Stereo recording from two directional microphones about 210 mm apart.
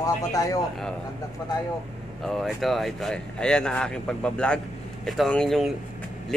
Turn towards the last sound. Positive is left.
turn(degrees=0)  # may be behind; listen again after turning